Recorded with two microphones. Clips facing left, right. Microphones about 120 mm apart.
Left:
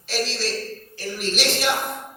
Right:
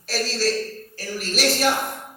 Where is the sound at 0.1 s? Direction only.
40° right (ahead or behind).